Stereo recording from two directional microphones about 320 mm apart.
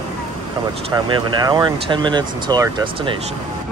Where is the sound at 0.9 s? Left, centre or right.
Centre.